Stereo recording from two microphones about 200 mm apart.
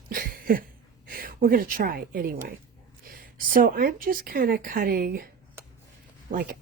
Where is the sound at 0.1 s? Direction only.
45° right (ahead or behind).